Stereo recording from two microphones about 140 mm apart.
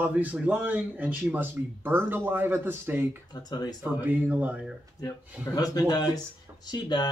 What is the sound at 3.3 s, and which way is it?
Speech, 30° left (ahead or behind).